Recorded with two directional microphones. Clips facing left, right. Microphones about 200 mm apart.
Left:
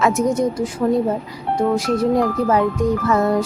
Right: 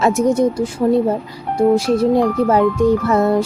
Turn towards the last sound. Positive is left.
turn(degrees=-30)  # may be behind; listen again after turning